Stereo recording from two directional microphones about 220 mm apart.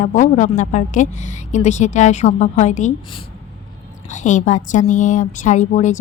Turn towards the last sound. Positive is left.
turn(degrees=35)  # may be behind; listen again after turning